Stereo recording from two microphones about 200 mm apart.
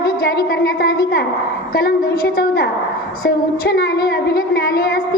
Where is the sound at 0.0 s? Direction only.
45° left (ahead or behind).